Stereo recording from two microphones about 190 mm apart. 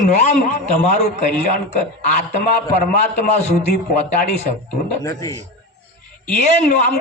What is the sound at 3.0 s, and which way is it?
Speech, 35° left (ahead or behind).